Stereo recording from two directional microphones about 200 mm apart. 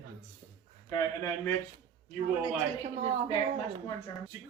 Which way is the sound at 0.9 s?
15° left (ahead or behind).